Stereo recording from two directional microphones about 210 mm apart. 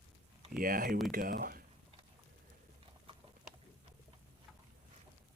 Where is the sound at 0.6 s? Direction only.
40° right (ahead or behind).